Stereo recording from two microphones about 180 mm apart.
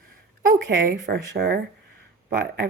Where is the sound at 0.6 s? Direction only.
80° right.